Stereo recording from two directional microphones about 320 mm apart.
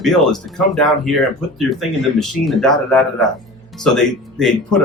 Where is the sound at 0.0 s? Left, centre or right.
Centre.